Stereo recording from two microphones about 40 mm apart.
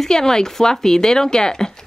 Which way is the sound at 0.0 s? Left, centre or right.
Centre.